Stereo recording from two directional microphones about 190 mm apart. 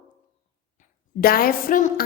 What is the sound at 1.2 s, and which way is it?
Speech, 50° left (ahead or behind).